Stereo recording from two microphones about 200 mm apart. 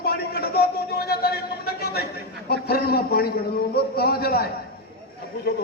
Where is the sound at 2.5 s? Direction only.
50° left (ahead or behind).